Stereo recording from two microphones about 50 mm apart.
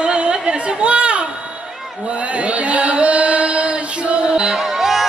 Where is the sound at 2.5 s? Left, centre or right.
Right.